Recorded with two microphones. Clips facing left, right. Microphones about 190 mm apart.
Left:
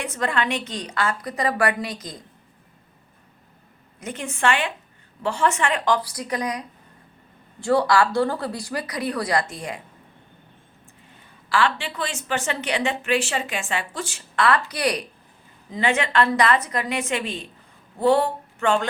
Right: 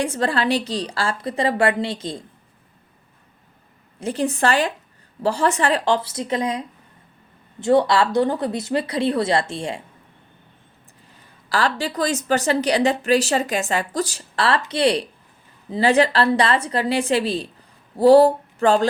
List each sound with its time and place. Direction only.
0.0 s a woman's voice: 30° right (ahead or behind)
4.0 s a woman's voice: 35° right (ahead or behind)
11.4 s a woman's voice: 40° right (ahead or behind)